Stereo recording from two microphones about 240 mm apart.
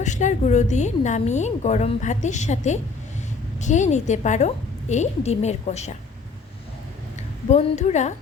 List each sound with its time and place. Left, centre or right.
0.0 s a woman's voice: left
7.5 s a woman's voice: left